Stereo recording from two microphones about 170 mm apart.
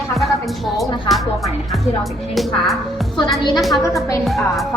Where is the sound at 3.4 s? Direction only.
25° left (ahead or behind).